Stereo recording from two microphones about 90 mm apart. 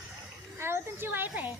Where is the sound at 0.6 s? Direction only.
25° right (ahead or behind).